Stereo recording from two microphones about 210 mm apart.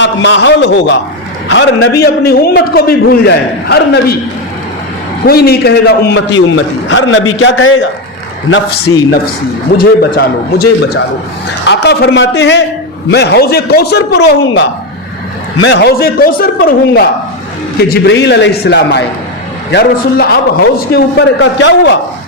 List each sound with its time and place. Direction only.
0.0 s a man's voice: 60° left (ahead or behind)
5.2 s a man's voice: 45° left (ahead or behind)
6.9 s a man's voice: 65° left (ahead or behind)
8.9 s speech: 85° left
9.7 s a man's voice: 50° left (ahead or behind)
15.6 s a man's voice: 55° left (ahead or behind)